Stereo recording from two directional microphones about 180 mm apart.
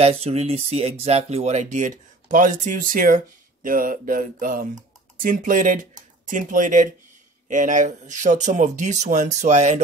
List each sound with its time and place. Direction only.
0.0 s speech: 35° right (ahead or behind)